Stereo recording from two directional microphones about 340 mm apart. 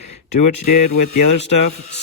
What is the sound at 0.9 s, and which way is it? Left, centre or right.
Speech, left.